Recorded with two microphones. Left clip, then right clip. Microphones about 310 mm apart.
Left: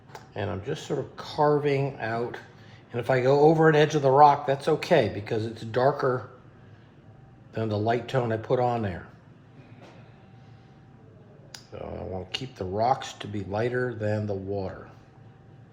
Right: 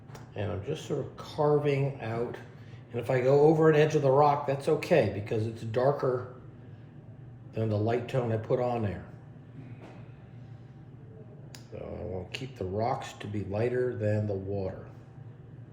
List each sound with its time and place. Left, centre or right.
0.1 s speech: centre
7.5 s speech: centre
11.8 s speech: centre